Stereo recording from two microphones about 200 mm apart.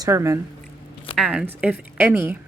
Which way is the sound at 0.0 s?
15° right (ahead or behind).